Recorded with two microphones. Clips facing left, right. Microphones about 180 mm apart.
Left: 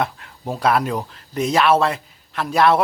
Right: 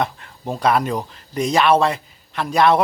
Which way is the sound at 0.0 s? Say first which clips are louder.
Even; 5° left (ahead or behind).